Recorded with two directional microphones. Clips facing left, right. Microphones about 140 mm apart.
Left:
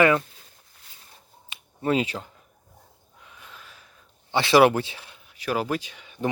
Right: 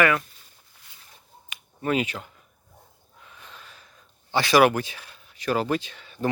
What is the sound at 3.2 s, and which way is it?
Gasp, 5° left (ahead or behind).